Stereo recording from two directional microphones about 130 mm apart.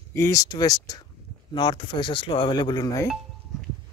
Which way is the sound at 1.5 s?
40° left (ahead or behind).